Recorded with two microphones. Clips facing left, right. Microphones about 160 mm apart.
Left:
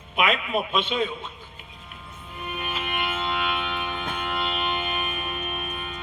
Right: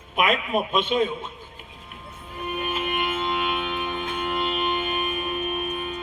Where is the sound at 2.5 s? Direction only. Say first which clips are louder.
Right 4 dB; 45° right (ahead or behind).